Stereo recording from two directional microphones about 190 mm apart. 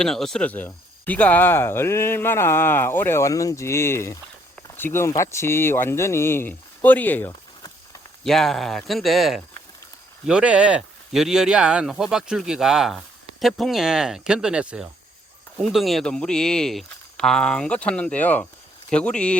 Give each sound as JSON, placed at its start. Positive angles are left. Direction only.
{"t": 0.0, "sound": "speech", "side_deg": 0}
{"t": 8.2, "sound": "speech", "side_deg": 0}